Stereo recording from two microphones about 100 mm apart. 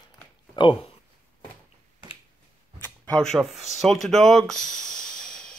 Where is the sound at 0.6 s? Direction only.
55° left (ahead or behind).